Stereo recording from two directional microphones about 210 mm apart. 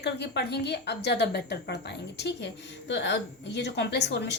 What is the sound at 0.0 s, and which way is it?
A woman's voice, 55° left (ahead or behind).